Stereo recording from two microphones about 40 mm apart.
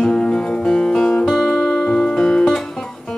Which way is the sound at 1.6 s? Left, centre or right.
Centre.